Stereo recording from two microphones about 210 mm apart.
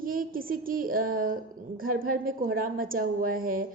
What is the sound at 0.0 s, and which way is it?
A woman's voice, 40° right (ahead or behind).